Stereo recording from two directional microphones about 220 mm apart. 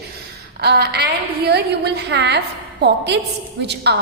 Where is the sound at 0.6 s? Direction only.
50° right (ahead or behind).